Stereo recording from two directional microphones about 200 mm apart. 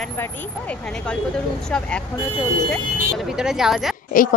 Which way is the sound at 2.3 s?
25° left (ahead or behind).